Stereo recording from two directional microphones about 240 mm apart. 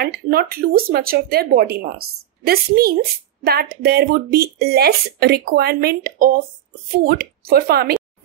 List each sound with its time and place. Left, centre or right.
0.0 s a woman's voice: right